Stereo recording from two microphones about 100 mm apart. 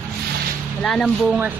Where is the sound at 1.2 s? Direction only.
10° right (ahead or behind).